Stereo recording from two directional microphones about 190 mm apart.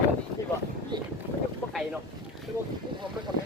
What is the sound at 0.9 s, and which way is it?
Speech, 25° right (ahead or behind).